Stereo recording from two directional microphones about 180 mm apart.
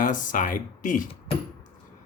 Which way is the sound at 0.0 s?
45° left (ahead or behind).